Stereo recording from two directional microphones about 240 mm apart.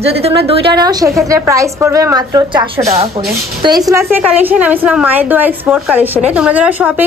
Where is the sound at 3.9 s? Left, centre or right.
Centre.